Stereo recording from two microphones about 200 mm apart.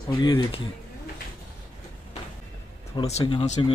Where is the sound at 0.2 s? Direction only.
25° left (ahead or behind).